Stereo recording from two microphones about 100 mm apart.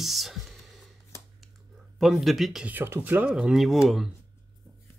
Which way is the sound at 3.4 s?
5° right (ahead or behind).